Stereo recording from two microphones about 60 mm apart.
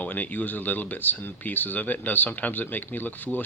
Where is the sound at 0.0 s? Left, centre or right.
Left.